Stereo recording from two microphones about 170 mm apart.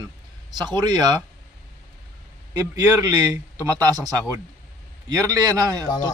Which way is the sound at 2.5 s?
20° right (ahead or behind).